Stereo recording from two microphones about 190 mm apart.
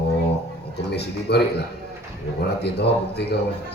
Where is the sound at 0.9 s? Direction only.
60° left (ahead or behind).